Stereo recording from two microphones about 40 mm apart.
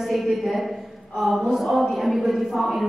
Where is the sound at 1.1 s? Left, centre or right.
Centre.